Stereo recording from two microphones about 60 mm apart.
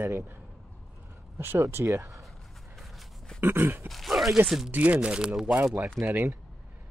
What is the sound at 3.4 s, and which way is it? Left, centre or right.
Speech, right.